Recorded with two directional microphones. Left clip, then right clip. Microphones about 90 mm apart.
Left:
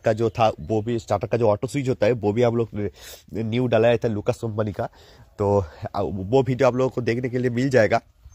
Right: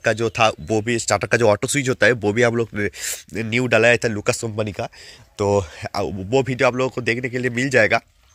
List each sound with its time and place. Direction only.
0.0 s speech: 20° left (ahead or behind)
0.7 s speech: 15° right (ahead or behind)
1.4 s speech: 25° right (ahead or behind)
1.7 s speech: centre (ahead or behind)
6.3 s a man's voice: 25° left (ahead or behind)